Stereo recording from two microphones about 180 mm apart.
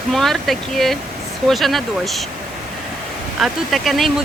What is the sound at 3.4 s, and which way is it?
Speech, centre (ahead or behind).